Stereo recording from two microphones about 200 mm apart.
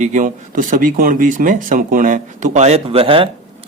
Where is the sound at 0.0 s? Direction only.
40° right (ahead or behind).